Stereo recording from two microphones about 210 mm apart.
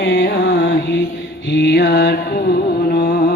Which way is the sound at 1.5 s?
50° left (ahead or behind).